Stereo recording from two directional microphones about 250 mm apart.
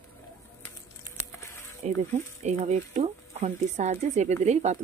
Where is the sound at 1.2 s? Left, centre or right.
Centre.